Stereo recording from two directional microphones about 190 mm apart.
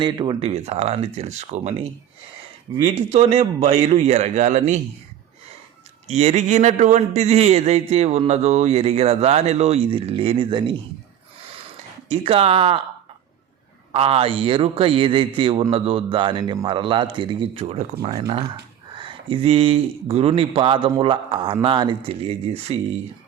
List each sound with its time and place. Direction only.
0.0 s a man's voice: 25° right (ahead or behind); by 4.8 s 40° right (ahead or behind)
6.1 s a man's voice: 35° right (ahead or behind)
12.0 s a man's voice: 30° right (ahead or behind)
13.9 s speech: 30° right (ahead or behind)
18.9 s speech: 25° right (ahead or behind)